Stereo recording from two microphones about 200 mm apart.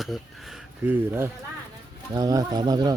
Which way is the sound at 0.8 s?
10° right (ahead or behind).